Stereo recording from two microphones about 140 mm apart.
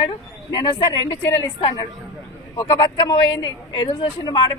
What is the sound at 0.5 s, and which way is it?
Speech, 35° left (ahead or behind).